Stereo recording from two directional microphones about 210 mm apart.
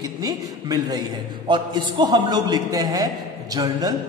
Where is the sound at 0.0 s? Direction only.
15° right (ahead or behind).